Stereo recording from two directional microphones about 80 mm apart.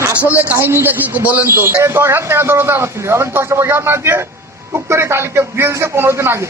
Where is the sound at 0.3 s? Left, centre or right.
Right.